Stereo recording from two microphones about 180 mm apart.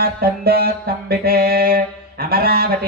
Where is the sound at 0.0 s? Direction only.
60° right (ahead or behind).